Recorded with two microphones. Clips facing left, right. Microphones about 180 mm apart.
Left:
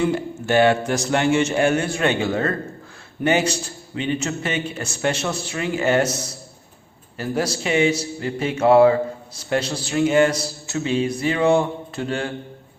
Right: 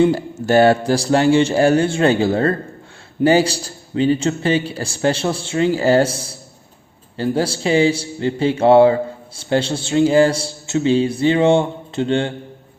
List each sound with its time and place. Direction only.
0.0 s a man's voice: 35° right (ahead or behind)